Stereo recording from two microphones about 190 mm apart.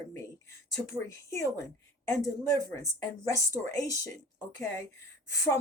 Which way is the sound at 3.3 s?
15° left (ahead or behind).